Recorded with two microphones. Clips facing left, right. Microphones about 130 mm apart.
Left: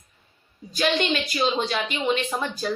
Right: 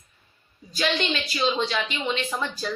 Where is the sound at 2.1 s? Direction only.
25° left (ahead or behind).